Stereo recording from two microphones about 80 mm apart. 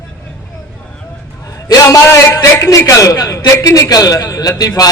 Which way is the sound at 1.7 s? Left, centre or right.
Left.